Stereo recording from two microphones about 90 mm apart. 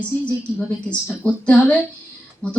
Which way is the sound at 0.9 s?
15° left (ahead or behind).